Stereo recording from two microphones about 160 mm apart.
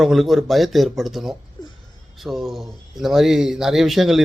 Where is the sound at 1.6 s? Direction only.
25° left (ahead or behind).